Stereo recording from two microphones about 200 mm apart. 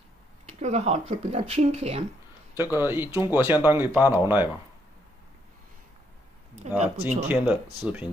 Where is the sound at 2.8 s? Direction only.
10° right (ahead or behind).